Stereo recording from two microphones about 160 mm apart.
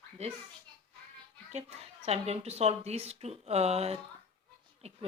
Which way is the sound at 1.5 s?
40° right (ahead or behind).